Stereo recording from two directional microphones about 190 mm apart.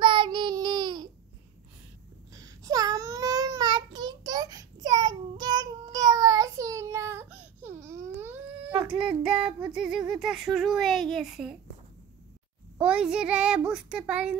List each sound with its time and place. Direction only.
0.0 s child singing: 25° right (ahead or behind)
2.3 s babbling: 20° right (ahead or behind)
9.0 s child singing: 5° right (ahead or behind)
12.7 s child singing: 5° right (ahead or behind)